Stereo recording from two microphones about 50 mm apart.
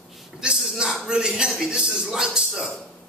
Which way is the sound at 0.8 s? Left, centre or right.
Centre.